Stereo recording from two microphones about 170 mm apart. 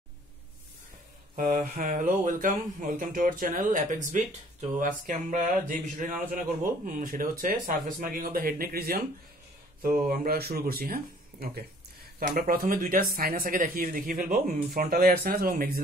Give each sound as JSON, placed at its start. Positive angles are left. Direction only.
{"t": 1.3, "sound": "speech", "side_deg": -50}